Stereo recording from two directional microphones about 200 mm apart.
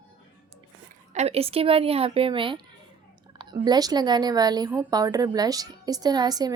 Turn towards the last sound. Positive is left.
turn(degrees=-20)  # may be behind; listen again after turning